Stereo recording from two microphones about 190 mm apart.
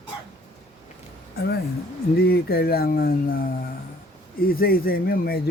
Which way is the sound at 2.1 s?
55° left (ahead or behind).